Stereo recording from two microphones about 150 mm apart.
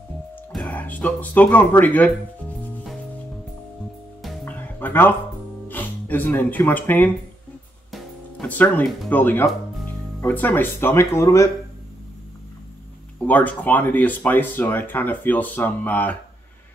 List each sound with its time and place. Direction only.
0.5 s speech: 5° left (ahead or behind)
4.5 s music: 10° left (ahead or behind)
5.7 s speech: 10° left (ahead or behind)
7.9 s music: 10° left (ahead or behind)
9.1 s speech: 15° left (ahead or behind)
13.3 s speech: 10° left (ahead or behind)